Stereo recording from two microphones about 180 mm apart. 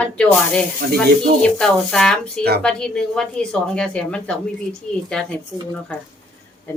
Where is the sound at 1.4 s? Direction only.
5° left (ahead or behind).